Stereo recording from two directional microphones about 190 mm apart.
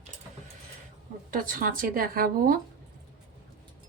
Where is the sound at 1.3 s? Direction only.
45° right (ahead or behind).